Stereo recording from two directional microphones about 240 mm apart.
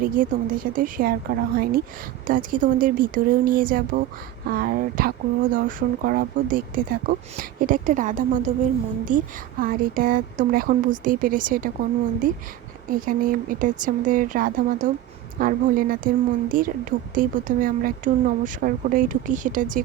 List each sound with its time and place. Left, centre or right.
0.0 s a woman's voice: right